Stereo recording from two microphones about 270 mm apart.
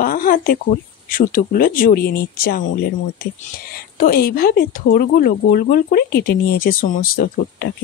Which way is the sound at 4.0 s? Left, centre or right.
Left.